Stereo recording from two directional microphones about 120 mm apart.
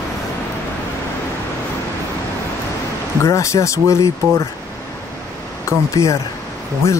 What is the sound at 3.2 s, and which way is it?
Speech, 25° left (ahead or behind).